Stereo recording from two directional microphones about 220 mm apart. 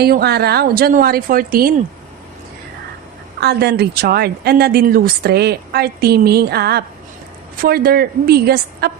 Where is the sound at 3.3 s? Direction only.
50° right (ahead or behind).